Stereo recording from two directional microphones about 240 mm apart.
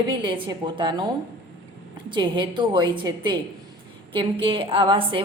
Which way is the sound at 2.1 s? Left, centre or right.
Centre.